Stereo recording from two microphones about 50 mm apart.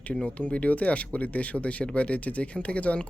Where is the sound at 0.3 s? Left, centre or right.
Left.